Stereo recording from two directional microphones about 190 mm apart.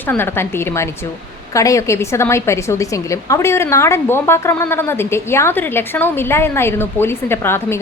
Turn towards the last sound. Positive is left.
turn(degrees=10)  # may be behind; listen again after turning